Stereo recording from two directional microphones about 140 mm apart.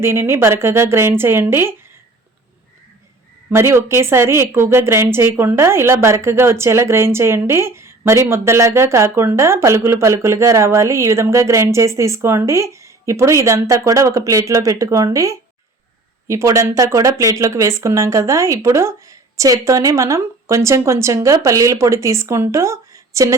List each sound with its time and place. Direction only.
0.0 s a woman's voice: 15° right (ahead or behind)
3.5 s a woman's voice: 20° right (ahead or behind)